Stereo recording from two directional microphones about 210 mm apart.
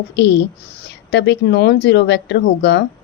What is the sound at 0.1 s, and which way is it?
Speech, 55° left (ahead or behind).